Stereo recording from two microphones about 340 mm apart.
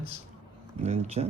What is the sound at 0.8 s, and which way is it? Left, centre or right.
Speech, centre.